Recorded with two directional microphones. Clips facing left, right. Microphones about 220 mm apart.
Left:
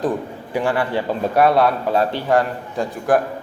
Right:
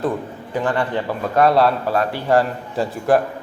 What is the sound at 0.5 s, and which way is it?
Speech, 10° left (ahead or behind).